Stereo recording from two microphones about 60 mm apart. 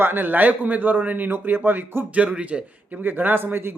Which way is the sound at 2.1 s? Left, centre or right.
Centre.